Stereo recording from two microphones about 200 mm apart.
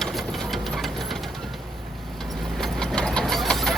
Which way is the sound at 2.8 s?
5° left (ahead or behind).